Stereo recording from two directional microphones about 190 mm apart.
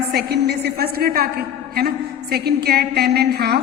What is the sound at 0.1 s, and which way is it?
A woman's voice, 60° right (ahead or behind).